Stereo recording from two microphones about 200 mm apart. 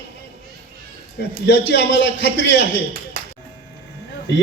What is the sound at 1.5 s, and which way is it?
A man's voice, 60° left (ahead or behind).